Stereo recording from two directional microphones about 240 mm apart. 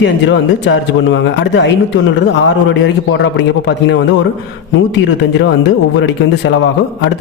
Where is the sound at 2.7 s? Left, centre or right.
Left.